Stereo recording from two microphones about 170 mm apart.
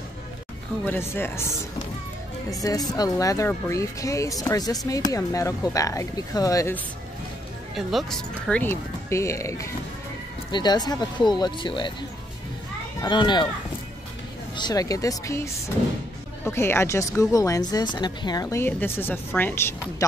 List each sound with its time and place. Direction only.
0.8 s speech: 10° left (ahead or behind)
2.6 s speech: 20° left (ahead or behind)
7.7 s speech: centre (ahead or behind); by 11.9 s 30° left (ahead or behind)
13.0 s speech: 25° left (ahead or behind)
14.5 s speech: 25° left (ahead or behind)